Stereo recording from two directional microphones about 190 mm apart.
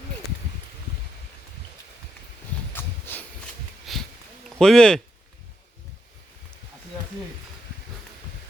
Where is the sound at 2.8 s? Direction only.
10° left (ahead or behind).